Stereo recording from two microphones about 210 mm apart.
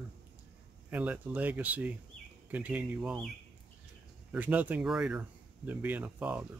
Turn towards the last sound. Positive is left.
turn(degrees=-5)  # may be behind; listen again after turning